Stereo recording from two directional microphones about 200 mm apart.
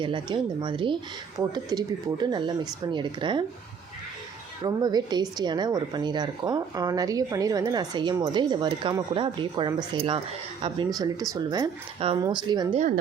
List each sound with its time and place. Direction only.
0.0 s speech: 25° right (ahead or behind)
4.6 s speech: 20° right (ahead or behind)